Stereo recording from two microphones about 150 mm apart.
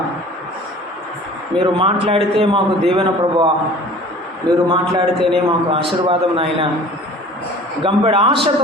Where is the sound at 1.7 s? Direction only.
35° right (ahead or behind).